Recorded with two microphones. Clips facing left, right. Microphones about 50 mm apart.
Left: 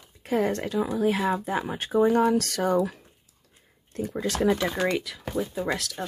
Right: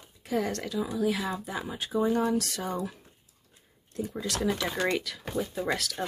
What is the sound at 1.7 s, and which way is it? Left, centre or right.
Speech, left.